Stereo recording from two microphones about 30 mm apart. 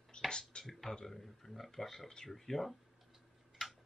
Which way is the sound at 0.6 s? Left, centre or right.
Centre.